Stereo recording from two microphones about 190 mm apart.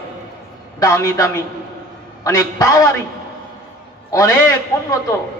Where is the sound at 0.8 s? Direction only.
15° left (ahead or behind).